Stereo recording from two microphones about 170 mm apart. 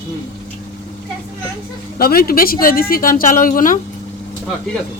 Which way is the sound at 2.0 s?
60° left (ahead or behind).